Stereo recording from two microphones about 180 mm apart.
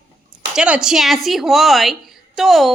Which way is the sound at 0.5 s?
5° right (ahead or behind).